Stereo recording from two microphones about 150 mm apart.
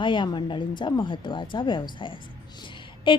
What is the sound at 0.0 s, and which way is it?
A woman's voice, 30° left (ahead or behind).